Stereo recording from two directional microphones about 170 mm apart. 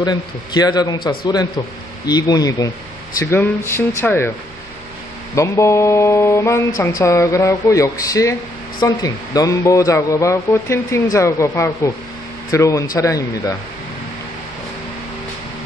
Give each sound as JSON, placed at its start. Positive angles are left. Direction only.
{"t": 0.0, "sound": "speech", "side_deg": 25}
{"t": 5.3, "sound": "speech", "side_deg": 15}